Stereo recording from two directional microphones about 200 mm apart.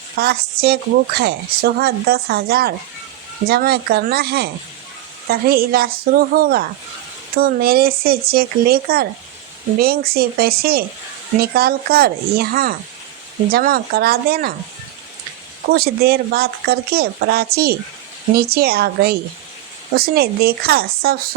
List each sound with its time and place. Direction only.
0.2 s a woman's voice: 50° right (ahead or behind)
15.7 s a woman's voice: 50° right (ahead or behind)